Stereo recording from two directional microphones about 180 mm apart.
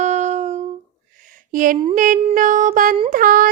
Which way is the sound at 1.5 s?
50° right (ahead or behind).